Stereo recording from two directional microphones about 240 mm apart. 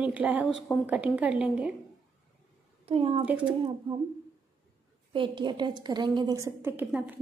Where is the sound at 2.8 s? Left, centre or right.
Right.